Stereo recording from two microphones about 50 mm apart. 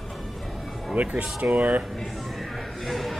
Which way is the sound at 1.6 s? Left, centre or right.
Right.